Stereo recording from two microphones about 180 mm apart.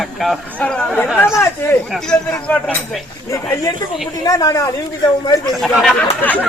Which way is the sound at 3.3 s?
15° left (ahead or behind).